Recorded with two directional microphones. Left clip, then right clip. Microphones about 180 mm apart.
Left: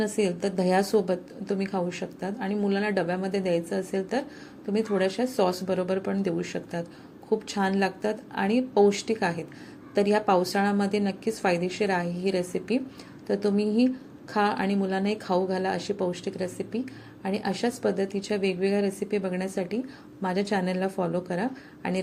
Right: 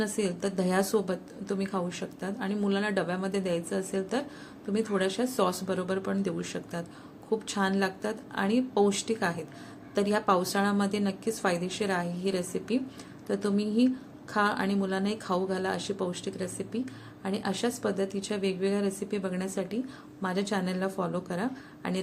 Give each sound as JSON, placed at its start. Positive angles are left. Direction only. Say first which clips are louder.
{"t": 0.0, "sound": "a woman's voice", "louder": "left 4 dB", "side_deg": 10}